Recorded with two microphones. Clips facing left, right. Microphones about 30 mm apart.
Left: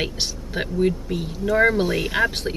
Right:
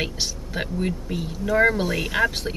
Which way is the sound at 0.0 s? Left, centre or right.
Centre.